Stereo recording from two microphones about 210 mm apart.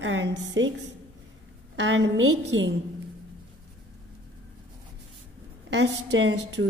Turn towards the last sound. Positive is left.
turn(degrees=-55)  # may be behind; listen again after turning